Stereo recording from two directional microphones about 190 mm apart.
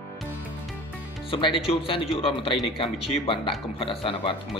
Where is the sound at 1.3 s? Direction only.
25° left (ahead or behind).